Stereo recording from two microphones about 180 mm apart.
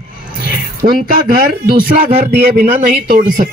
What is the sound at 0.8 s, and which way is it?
Speech, 40° right (ahead or behind).